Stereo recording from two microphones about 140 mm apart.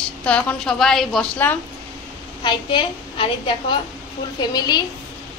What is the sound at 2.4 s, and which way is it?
A woman's voice, 35° left (ahead or behind).